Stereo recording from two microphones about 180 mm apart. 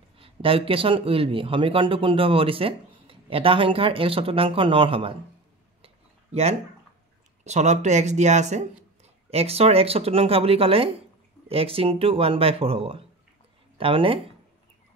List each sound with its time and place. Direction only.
0.2 s speech: 30° right (ahead or behind)
6.3 s speech: 35° right (ahead or behind)